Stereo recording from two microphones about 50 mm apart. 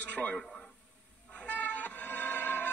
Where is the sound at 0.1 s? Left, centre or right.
Left.